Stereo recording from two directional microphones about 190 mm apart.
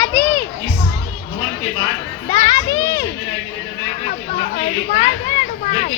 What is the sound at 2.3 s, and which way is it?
Children playing, 20° left (ahead or behind).